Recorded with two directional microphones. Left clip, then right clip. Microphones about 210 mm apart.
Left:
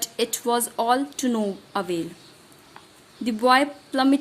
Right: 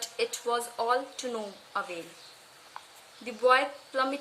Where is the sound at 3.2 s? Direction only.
45° left (ahead or behind).